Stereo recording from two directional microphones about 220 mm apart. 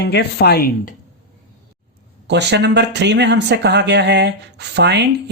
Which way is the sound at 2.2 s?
50° right (ahead or behind).